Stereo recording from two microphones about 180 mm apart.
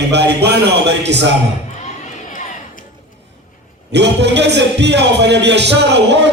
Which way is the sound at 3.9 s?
70° right (ahead or behind).